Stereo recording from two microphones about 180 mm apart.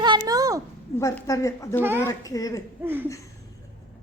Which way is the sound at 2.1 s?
20° left (ahead or behind).